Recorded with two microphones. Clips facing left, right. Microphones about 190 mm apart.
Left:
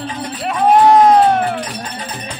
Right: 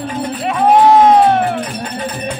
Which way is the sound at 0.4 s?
Centre (ahead or behind).